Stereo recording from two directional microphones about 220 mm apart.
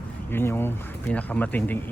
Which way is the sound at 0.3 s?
10° left (ahead or behind).